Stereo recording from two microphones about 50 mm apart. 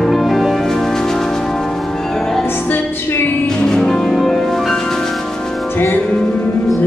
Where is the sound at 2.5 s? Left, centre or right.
Left.